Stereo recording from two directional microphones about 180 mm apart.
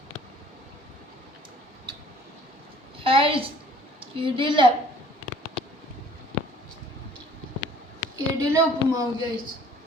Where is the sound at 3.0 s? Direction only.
30° right (ahead or behind).